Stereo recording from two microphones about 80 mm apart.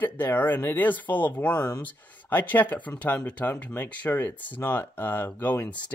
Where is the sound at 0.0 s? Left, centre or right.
Left.